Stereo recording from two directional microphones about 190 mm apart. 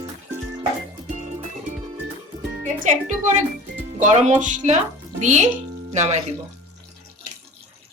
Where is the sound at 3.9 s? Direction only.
40° right (ahead or behind).